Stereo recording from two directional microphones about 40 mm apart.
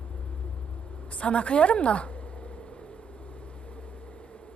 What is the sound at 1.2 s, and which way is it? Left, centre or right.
Speech, left.